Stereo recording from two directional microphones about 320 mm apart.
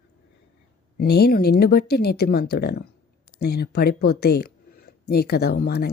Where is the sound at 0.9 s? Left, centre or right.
Left.